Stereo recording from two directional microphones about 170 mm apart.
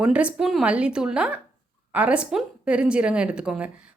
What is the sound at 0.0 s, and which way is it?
A woman's voice, 5° right (ahead or behind).